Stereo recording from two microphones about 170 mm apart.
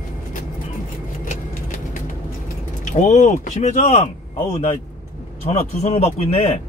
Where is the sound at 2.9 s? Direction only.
45° left (ahead or behind).